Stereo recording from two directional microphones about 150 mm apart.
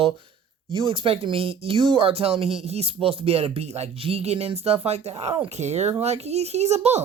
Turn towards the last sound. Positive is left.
turn(degrees=-45)  # may be behind; listen again after turning